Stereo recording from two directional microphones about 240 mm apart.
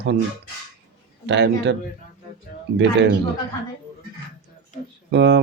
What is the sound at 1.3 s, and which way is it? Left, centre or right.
Speech, right.